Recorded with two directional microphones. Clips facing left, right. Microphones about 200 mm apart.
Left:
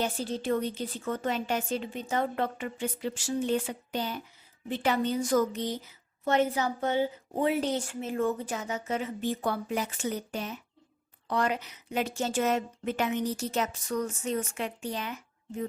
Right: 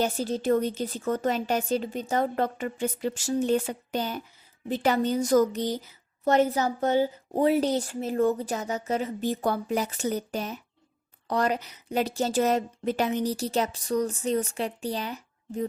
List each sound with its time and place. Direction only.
0.0 s a woman's voice: 40° right (ahead or behind)